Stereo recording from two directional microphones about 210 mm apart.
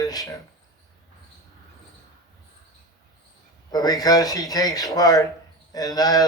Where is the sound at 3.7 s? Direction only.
20° left (ahead or behind).